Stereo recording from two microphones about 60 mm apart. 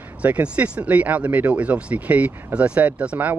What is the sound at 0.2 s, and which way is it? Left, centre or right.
Speech, right.